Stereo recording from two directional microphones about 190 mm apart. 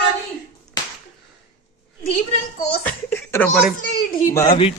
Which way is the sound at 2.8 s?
10° left (ahead or behind).